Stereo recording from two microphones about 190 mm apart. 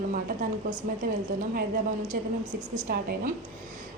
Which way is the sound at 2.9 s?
50° right (ahead or behind).